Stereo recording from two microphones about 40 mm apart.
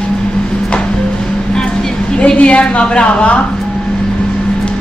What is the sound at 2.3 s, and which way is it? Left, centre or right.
A woman's voice, left.